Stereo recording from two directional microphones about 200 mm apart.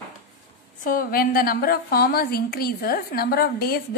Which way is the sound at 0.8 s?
45° left (ahead or behind).